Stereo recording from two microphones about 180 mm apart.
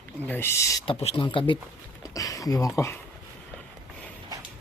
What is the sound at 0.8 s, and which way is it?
Speech, 30° left (ahead or behind).